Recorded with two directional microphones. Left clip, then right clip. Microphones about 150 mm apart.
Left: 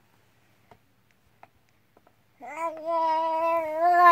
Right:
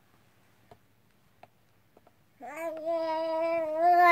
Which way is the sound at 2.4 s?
5° right (ahead or behind).